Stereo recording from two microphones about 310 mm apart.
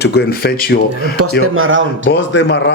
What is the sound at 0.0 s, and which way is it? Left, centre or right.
Speech, left.